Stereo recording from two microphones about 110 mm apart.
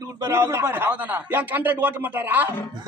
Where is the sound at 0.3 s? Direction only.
25° right (ahead or behind).